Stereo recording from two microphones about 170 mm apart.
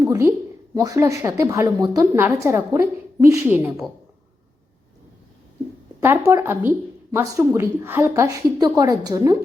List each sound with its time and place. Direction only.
0.0 s a woman's voice: 15° right (ahead or behind)
6.0 s a woman's voice: 15° right (ahead or behind)